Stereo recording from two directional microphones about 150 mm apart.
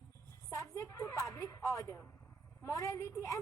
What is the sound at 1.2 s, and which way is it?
A woman's voice, 20° left (ahead or behind).